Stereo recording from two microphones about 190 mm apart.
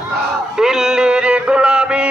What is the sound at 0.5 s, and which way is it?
Music, 5° right (ahead or behind).